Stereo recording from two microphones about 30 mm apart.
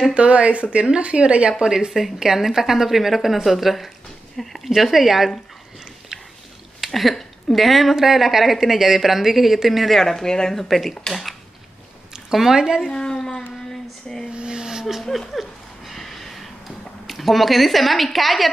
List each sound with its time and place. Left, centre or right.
0.1 s speech: right
2.1 s a woman's voice: centre
4.6 s speech: centre
6.1 s a sound: right
6.8 s a woman's voice: centre
9.9 s speech: centre
10.5 s speech: centre
12.3 s speech: centre
12.5 s speech: centre
12.9 s speech: left
14.3 s a sound: right
15.3 s a sound: centre
17.0 s speech: centre